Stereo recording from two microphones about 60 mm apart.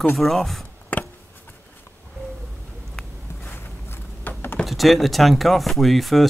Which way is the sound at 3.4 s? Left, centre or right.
Left.